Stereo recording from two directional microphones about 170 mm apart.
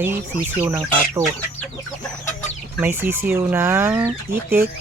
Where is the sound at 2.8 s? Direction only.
10° right (ahead or behind).